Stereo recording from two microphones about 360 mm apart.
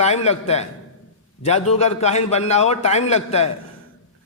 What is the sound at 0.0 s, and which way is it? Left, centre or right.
A man's voice, centre.